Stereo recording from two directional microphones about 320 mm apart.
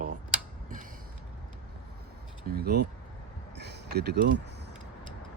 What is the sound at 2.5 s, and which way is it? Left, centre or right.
Speech, right.